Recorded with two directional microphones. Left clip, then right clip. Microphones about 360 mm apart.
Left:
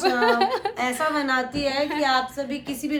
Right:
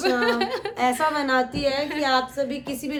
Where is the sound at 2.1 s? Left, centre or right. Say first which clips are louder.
Right 1 dB; centre.